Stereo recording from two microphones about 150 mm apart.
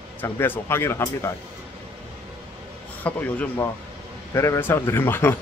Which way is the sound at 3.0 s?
10° left (ahead or behind).